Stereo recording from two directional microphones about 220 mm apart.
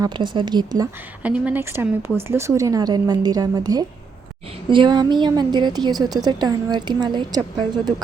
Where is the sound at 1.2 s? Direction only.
5° right (ahead or behind).